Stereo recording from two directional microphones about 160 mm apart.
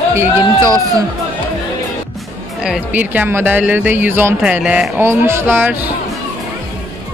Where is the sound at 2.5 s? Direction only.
5° right (ahead or behind).